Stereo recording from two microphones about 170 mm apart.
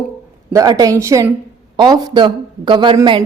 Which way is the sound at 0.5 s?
20° right (ahead or behind).